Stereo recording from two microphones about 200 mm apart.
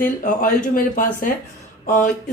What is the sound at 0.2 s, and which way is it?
Speech, 40° left (ahead or behind).